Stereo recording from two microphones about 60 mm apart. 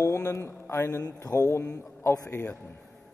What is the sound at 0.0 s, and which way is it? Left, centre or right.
A man's voice, left.